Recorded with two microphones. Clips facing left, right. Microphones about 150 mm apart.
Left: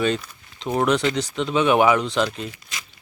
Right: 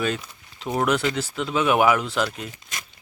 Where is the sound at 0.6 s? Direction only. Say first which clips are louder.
Left 2 dB; 5° right (ahead or behind).